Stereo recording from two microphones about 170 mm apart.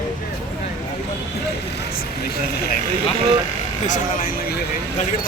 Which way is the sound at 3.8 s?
50° left (ahead or behind).